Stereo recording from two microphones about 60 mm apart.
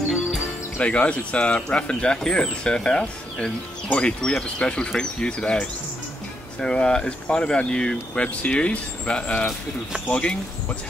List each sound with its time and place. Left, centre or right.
0.7 s speech: left